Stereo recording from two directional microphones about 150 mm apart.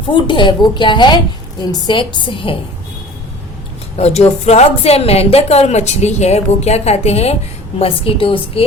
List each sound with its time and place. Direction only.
0.0 s a woman's voice: 35° left (ahead or behind)
3.9 s a woman's voice: 45° left (ahead or behind)